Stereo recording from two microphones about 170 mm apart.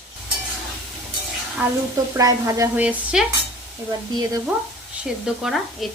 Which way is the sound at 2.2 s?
20° right (ahead or behind).